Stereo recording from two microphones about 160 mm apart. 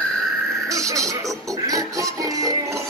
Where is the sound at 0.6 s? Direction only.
20° right (ahead or behind).